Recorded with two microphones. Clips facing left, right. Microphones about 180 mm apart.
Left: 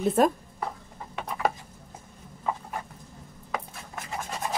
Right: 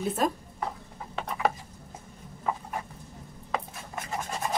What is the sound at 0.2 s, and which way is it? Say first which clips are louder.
Speech: left 6 dB; 55° left (ahead or behind).